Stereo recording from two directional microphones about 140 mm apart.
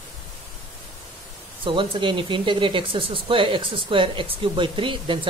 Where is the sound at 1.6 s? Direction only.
35° right (ahead or behind).